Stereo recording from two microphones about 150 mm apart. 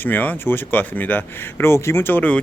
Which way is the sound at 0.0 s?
10° left (ahead or behind).